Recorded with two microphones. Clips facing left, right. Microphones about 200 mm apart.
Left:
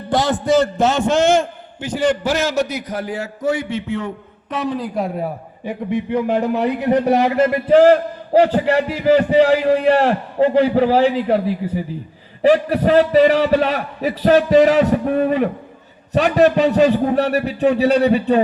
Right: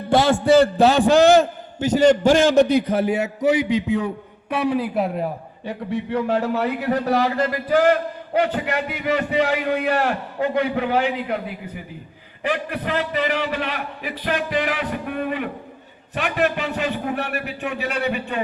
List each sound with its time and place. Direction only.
0.3 s a man's voice: 30° right (ahead or behind)
2.6 s a man's voice: 30° right (ahead or behind); by 5.2 s centre (ahead or behind)
6.1 s a man's voice: 15° left (ahead or behind); by 18.4 s 35° left (ahead or behind)